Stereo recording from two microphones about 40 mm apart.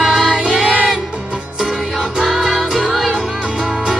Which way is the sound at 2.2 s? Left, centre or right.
Centre.